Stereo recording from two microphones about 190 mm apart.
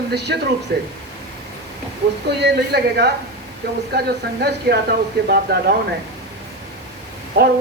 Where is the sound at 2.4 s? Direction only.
60° right (ahead or behind).